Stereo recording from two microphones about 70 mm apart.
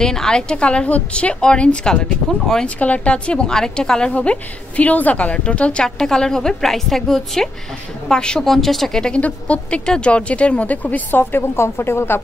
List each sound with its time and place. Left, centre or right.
0.0 s a woman's voice: centre
2.8 s a woman's voice: centre; by 12.2 s left